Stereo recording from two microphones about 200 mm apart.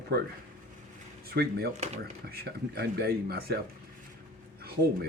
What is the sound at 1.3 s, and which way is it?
Speech, 50° right (ahead or behind).